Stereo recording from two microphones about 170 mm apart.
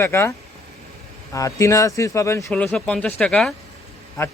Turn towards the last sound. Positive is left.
turn(degrees=15)  # may be behind; listen again after turning